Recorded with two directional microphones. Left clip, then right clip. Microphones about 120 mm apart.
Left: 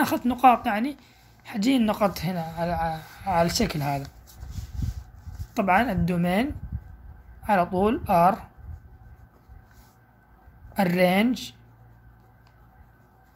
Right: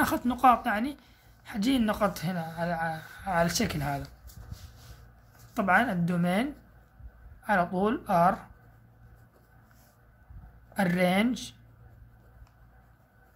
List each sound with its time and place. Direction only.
0.0 s a woman's voice: 10° left (ahead or behind)
5.5 s a woman's voice: 15° left (ahead or behind)
10.7 s speech: 20° left (ahead or behind)